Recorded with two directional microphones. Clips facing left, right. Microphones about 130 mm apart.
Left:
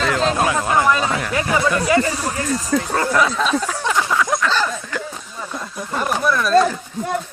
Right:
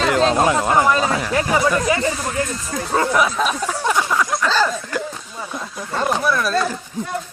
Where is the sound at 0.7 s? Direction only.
25° right (ahead or behind).